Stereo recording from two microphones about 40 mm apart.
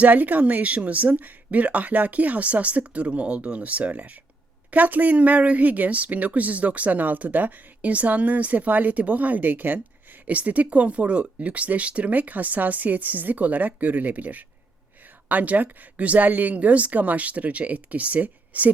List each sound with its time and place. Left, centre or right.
0.0 s a woman's voice: right